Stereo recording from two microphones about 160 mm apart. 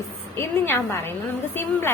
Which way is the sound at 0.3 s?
15° left (ahead or behind).